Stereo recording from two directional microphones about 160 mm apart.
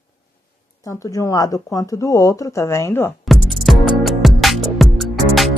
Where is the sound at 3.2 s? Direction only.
Centre (ahead or behind).